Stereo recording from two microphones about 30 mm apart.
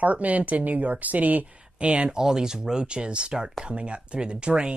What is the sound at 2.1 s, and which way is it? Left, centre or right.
Speech, right.